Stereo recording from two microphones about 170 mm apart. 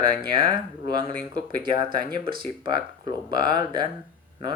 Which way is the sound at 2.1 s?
25° right (ahead or behind).